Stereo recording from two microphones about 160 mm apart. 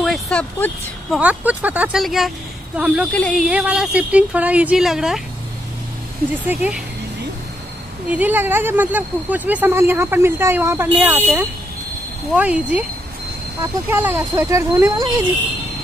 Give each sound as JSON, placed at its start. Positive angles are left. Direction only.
{"t": 0.0, "sound": "vehicle", "side_deg": 5}
{"t": 1.2, "sound": "speech", "side_deg": -10}
{"t": 3.1, "sound": "speech", "side_deg": 5}
{"t": 3.4, "sound": "speech", "side_deg": -5}
{"t": 6.4, "sound": "speech", "side_deg": -10}
{"t": 8.1, "sound": "speech", "side_deg": -10}
{"t": 12.4, "sound": "speech", "side_deg": -10}
{"t": 13.8, "sound": "speech", "side_deg": -15}